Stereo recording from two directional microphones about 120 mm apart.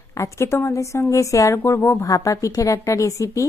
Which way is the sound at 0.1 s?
25° left (ahead or behind).